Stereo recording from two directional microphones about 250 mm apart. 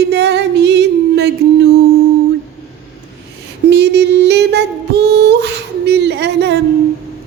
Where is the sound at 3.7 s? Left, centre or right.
Right.